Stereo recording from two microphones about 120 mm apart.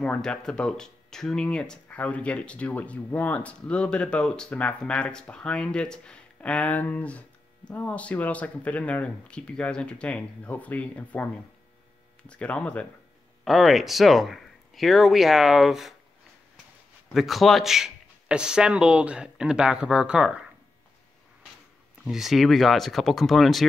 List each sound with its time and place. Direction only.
0.0 s speech: 10° left (ahead or behind)
12.3 s speech: 10° left (ahead or behind)
17.1 s speech: centre (ahead or behind)
22.0 s speech: 5° right (ahead or behind)